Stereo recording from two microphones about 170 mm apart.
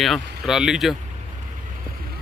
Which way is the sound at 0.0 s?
Centre (ahead or behind).